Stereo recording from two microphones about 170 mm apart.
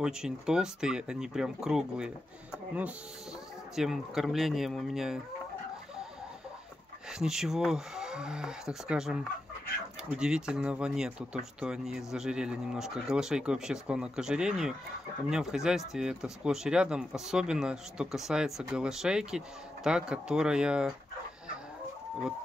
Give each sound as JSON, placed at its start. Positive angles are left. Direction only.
{"t": 0.0, "sound": "speech", "side_deg": -5}
{"t": 7.1, "sound": "speech", "side_deg": -5}